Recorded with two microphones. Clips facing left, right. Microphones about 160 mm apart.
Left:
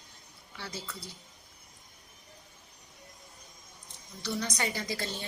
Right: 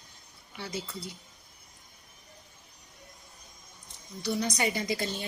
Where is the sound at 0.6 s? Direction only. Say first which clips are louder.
Right 4 dB; 15° right (ahead or behind).